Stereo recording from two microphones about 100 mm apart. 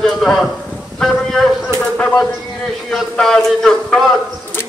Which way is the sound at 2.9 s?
5° left (ahead or behind).